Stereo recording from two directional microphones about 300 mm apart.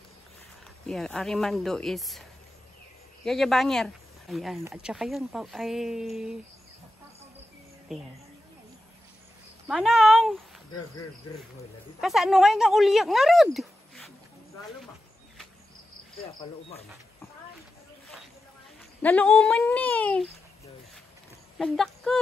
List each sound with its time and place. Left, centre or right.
0.8 s speech: centre
3.3 s speech: centre
7.9 s speech: centre
9.7 s speech: centre
12.0 s speech: centre
16.4 s speech: centre
19.0 s speech: centre
21.5 s speech: centre